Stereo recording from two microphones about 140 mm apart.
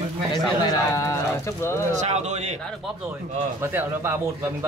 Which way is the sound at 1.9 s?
55° right (ahead or behind).